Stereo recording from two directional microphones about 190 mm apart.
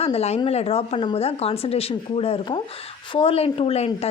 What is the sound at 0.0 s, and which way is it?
A woman's voice, 35° left (ahead or behind).